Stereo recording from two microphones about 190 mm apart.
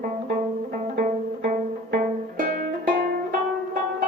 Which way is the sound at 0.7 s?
50° right (ahead or behind).